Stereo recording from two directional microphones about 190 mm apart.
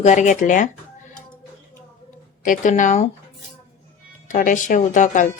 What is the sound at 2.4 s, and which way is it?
Speech, 45° left (ahead or behind).